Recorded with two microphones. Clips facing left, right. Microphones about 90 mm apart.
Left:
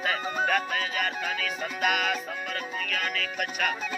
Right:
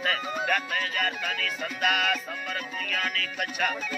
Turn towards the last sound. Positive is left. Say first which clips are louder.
# even
turn(degrees=0)  # may be behind; listen again after turning